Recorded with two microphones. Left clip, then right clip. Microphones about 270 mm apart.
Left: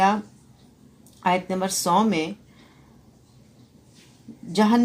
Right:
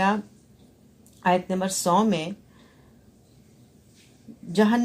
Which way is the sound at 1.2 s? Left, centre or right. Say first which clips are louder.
Even; right.